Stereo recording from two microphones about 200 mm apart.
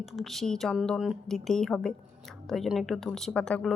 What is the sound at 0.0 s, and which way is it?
Speech, centre (ahead or behind).